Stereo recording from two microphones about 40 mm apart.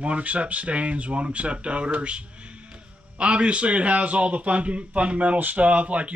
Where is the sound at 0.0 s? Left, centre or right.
Right.